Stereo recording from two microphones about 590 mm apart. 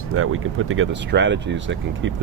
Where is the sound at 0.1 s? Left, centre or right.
Right.